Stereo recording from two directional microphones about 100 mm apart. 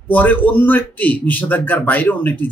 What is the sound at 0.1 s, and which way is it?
A man's voice, 15° left (ahead or behind).